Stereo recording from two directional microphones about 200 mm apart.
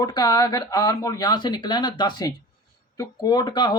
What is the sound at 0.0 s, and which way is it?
Speech, 20° left (ahead or behind).